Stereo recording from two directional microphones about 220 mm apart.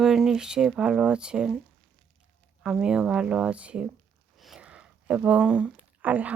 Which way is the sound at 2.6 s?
5° right (ahead or behind).